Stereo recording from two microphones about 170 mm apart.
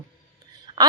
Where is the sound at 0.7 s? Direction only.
30° right (ahead or behind).